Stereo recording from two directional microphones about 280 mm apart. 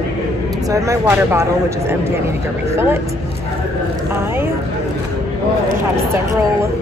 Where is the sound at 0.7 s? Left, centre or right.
Centre.